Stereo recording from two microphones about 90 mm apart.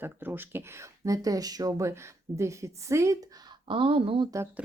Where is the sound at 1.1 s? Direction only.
40° right (ahead or behind).